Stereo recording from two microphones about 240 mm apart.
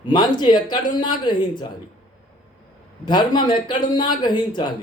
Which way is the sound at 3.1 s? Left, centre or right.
Centre.